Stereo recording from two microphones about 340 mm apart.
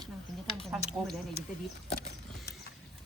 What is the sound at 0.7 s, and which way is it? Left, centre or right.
Speech, centre.